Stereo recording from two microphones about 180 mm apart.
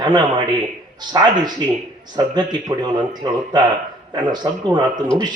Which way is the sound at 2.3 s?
25° right (ahead or behind).